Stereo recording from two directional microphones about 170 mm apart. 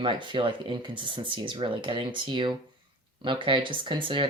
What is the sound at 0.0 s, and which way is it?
Speech, 30° right (ahead or behind).